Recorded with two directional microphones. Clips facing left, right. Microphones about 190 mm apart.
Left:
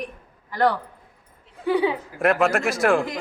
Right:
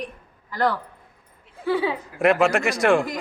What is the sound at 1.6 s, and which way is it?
Speech, 15° left (ahead or behind).